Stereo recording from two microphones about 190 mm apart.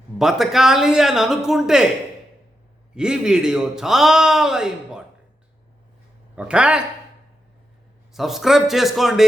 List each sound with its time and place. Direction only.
0.2 s a man's voice: centre (ahead or behind)
2.9 s a man's voice: 5° right (ahead or behind)
6.3 s a man's voice: 5° right (ahead or behind)
8.1 s a man's voice: centre (ahead or behind)